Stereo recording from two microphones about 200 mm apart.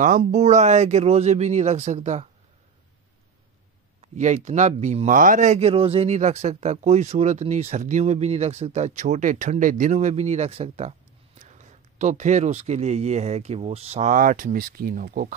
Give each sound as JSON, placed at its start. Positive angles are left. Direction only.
{"t": 0.0, "sound": "speech", "side_deg": -40}
{"t": 4.0, "sound": "speech", "side_deg": -35}